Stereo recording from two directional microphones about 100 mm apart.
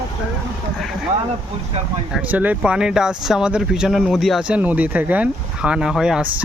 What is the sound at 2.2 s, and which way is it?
Speech, 15° right (ahead or behind).